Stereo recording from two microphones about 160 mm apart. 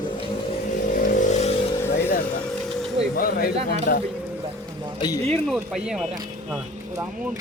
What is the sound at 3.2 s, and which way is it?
Speech, 65° left (ahead or behind).